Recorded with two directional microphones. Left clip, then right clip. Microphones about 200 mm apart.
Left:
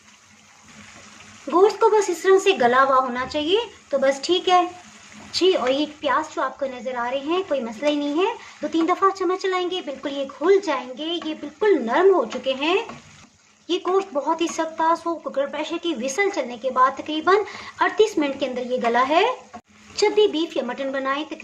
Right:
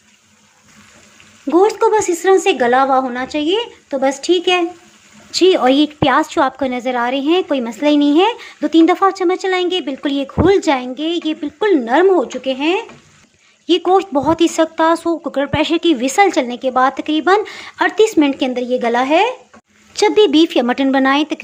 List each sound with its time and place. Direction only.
1.5 s a woman's voice: 35° right (ahead or behind)